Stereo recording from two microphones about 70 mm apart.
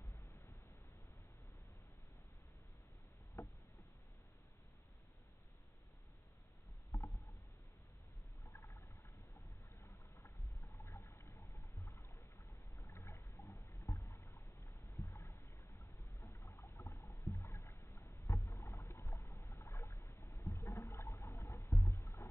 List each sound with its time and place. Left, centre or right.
6.9 s rowboat: left
8.5 s a sound: left
9.8 s boat: left
16.2 s a sound: left
17.4 s rowboat: left
18.2 s rowboat: left
18.5 s rowboat: left
20.7 s a sound: left
21.6 s music: left
21.9 s music: left